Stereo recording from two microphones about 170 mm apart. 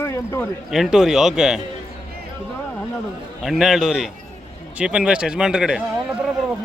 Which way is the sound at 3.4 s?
Centre (ahead or behind).